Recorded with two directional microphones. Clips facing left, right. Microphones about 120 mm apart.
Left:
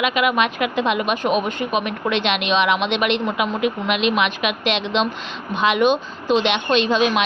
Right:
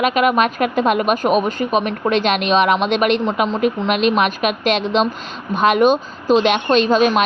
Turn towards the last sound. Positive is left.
turn(degrees=-45)  # may be behind; listen again after turning